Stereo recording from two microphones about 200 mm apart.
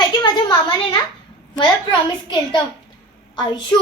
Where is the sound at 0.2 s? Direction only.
20° left (ahead or behind).